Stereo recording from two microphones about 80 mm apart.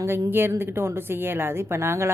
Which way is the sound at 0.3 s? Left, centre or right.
Right.